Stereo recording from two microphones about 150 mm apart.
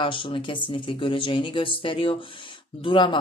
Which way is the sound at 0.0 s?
35° left (ahead or behind).